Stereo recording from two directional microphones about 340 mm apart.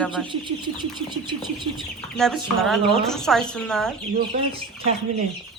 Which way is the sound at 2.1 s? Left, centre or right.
Centre.